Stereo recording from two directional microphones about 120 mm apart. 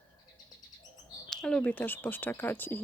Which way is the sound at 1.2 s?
5° left (ahead or behind).